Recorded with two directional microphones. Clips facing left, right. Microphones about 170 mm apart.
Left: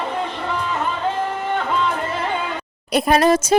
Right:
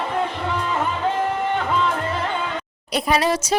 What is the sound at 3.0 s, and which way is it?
Speech, 50° left (ahead or behind).